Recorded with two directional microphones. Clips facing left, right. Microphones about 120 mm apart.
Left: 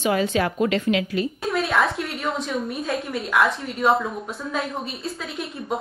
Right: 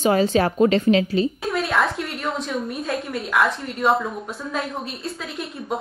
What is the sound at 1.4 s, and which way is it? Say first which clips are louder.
A woman's voice: even; centre (ahead or behind).